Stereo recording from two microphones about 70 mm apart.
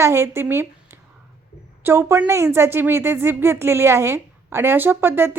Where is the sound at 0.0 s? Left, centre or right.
Right.